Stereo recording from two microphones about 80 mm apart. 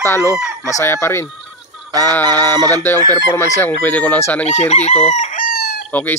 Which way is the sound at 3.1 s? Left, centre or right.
Left.